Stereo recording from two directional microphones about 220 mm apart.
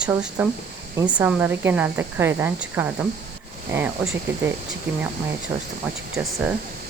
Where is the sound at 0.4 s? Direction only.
10° right (ahead or behind).